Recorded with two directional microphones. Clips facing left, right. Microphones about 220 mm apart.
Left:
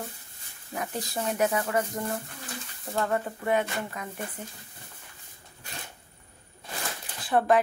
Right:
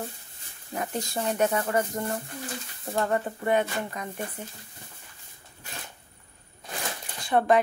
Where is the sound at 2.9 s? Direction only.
20° right (ahead or behind).